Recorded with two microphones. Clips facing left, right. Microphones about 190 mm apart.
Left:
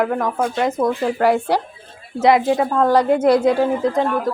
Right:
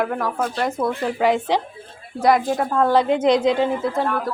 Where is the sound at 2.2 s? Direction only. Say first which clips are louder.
Left 3 dB; 25° left (ahead or behind).